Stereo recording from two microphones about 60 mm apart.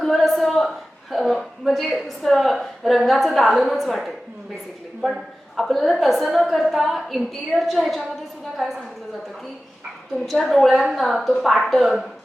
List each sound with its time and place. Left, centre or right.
0.0 s a sound: centre
1.1 s a woman's voice: centre
10.2 s a woman's voice: centre